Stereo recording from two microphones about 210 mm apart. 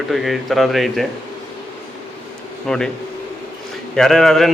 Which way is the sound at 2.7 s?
5° left (ahead or behind).